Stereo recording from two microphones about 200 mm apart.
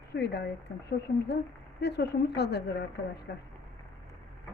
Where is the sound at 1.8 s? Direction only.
55° left (ahead or behind).